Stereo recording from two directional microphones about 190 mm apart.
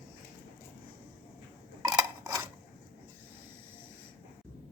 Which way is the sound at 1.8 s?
15° right (ahead or behind).